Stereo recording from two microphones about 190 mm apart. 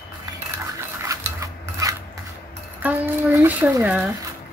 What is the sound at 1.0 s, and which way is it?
Filing, 15° right (ahead or behind).